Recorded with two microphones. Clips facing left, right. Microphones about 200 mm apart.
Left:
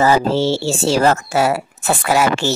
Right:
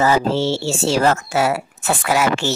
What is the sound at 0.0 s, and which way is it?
Speech, 35° left (ahead or behind).